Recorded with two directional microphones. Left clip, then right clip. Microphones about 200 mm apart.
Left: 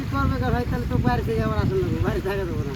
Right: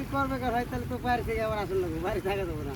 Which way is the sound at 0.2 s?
20° right (ahead or behind).